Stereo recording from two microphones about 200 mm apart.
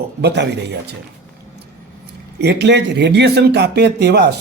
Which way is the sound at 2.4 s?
60° right (ahead or behind).